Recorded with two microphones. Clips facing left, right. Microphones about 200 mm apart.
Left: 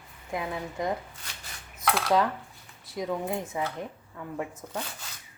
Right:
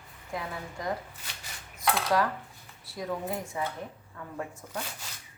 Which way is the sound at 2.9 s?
20° left (ahead or behind).